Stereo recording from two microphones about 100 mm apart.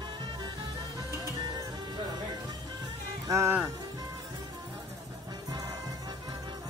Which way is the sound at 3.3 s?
30° right (ahead or behind).